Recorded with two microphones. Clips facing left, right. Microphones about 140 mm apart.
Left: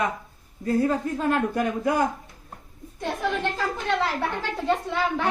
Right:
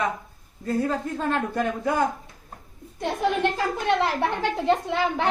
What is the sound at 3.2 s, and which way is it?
A woman's voice, 15° right (ahead or behind).